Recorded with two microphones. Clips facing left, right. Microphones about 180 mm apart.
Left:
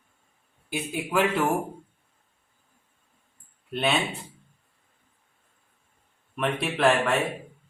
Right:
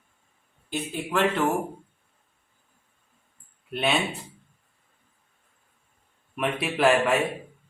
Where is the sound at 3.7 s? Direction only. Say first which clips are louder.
Even; centre (ahead or behind).